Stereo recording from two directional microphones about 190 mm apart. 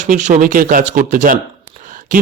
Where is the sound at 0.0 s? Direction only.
40° right (ahead or behind).